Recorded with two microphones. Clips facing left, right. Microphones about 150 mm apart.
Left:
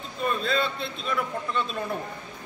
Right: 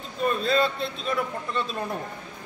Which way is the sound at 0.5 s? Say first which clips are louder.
Right 4 dB; 40° right (ahead or behind).